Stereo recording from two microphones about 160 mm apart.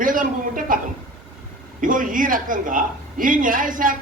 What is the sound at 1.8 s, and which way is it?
A man's voice, 55° right (ahead or behind).